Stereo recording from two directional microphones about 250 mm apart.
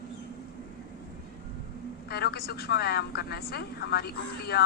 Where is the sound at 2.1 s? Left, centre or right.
Left.